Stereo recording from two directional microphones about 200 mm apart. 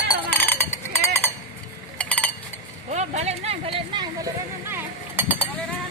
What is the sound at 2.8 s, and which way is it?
Vehicle, 35° right (ahead or behind).